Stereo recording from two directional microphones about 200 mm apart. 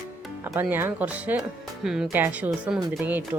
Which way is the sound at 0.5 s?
10° right (ahead or behind).